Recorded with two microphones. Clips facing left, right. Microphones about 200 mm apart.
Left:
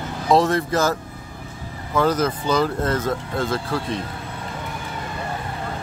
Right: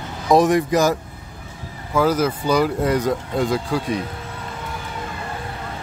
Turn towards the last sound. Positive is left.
turn(degrees=-15)  # may be behind; listen again after turning